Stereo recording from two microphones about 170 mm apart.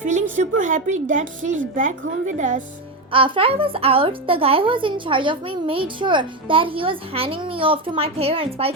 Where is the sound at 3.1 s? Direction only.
30° right (ahead or behind).